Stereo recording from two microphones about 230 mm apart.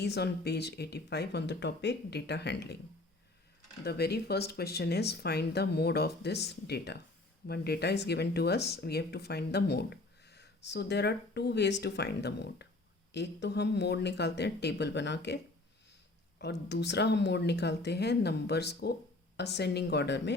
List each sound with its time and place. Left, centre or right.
0.0 s speech: left
3.8 s speech: left
16.4 s speech: left